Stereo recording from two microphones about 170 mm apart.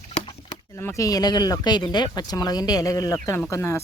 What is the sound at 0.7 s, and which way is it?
Speech, 15° left (ahead or behind).